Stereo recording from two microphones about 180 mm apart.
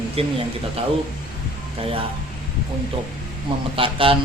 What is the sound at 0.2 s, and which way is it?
Speech, 35° right (ahead or behind).